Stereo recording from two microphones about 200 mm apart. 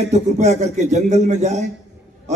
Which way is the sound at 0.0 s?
35° right (ahead or behind).